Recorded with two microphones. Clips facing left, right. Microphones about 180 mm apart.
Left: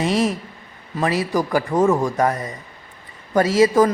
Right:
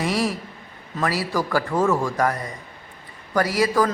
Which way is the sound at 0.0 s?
20° left (ahead or behind).